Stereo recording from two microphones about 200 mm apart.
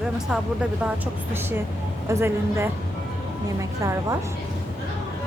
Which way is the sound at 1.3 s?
10° right (ahead or behind).